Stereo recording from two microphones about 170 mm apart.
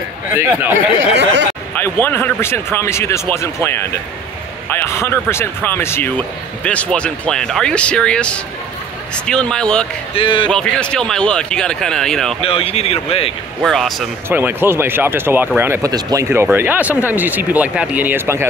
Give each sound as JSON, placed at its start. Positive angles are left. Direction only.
{"t": 0.3, "sound": "speech", "side_deg": -15}
{"t": 1.1, "sound": "speech", "side_deg": -90}
{"t": 1.8, "sound": "speech", "side_deg": 10}
{"t": 10.1, "sound": "a man's voice", "side_deg": 30}
{"t": 10.5, "sound": "speech", "side_deg": 5}
{"t": 12.4, "sound": "speech", "side_deg": 35}
{"t": 13.6, "sound": "speech", "side_deg": 0}
{"t": 14.3, "sound": "speech", "side_deg": -10}